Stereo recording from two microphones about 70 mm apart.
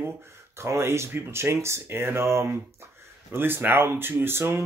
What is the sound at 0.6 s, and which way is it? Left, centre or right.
Speech, right.